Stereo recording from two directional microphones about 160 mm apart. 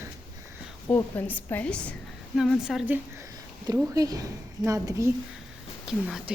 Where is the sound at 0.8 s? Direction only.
15° left (ahead or behind); by 5.1 s 20° right (ahead or behind).